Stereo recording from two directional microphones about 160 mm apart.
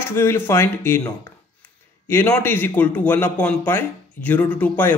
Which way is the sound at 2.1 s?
15° left (ahead or behind).